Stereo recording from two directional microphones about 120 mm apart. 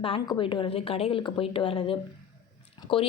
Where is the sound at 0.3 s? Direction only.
45° left (ahead or behind).